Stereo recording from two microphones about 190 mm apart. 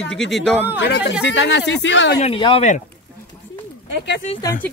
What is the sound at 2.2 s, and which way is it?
Speech, 30° left (ahead or behind).